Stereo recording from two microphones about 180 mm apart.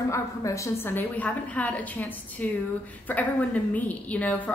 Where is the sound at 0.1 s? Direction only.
15° left (ahead or behind).